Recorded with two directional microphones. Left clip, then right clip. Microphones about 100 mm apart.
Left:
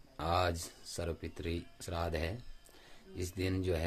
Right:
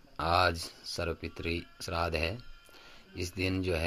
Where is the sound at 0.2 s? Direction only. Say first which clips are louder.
Right 6 dB; 20° right (ahead or behind).